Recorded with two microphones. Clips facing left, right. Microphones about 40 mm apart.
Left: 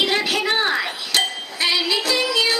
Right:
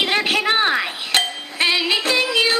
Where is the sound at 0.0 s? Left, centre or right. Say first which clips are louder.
Right 1 dB; right.